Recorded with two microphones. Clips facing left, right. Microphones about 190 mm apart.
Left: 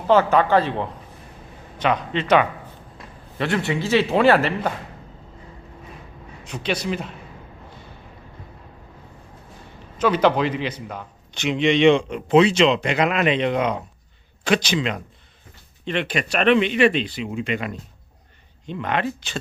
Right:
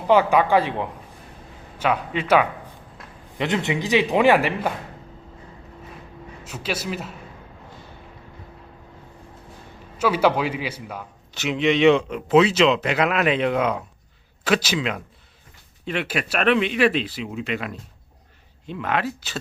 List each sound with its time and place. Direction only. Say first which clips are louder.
0.1 s a man's voice: left 1 dB; 10° right (ahead or behind)
3.3 s a man's voice: even; 20° right (ahead or behind)
6.4 s a man's voice: left 3 dB; 5° right (ahead or behind)
10.0 s a man's voice: left 1 dB; 10° right (ahead or behind)